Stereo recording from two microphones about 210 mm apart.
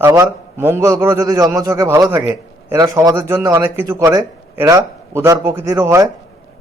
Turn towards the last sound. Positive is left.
turn(degrees=-15)  # may be behind; listen again after turning